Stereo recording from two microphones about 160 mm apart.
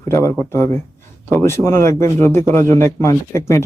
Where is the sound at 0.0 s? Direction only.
15° left (ahead or behind).